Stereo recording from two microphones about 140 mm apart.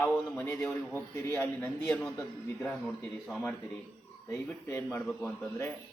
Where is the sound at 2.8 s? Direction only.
5° left (ahead or behind).